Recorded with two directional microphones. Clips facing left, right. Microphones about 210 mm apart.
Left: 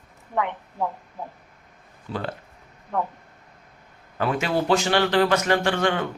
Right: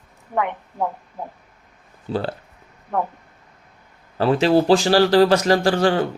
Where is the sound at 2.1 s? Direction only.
30° right (ahead or behind).